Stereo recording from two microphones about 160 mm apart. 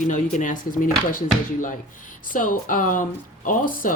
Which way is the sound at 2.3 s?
55° left (ahead or behind).